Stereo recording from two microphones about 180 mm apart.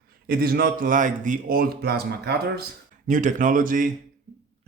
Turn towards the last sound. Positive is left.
turn(degrees=-50)  # may be behind; listen again after turning